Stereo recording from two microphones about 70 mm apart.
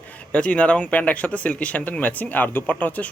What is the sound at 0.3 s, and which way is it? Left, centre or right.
Speech, centre.